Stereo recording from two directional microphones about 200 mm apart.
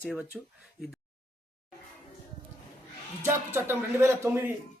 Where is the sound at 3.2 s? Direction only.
10° right (ahead or behind).